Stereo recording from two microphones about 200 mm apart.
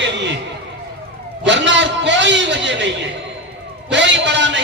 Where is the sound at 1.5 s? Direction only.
60° right (ahead or behind).